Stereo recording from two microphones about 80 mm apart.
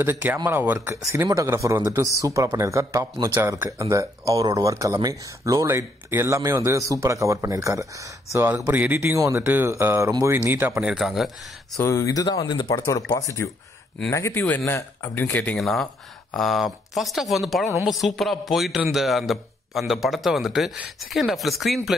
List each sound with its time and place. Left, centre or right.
0.0 s speech: right
1.1 s speech: right
8.7 s speech: centre
9.0 s speech: right
11.0 s speech: centre
11.8 s speech: left
13.4 s speech: left
14.3 s speech: left
15.5 s speech: centre